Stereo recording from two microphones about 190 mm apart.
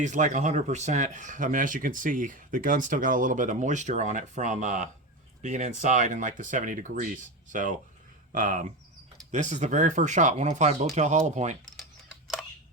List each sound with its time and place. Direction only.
0.0 s speech: 40° right (ahead or behind)